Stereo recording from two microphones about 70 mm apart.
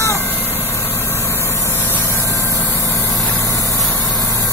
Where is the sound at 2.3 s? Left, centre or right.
Left.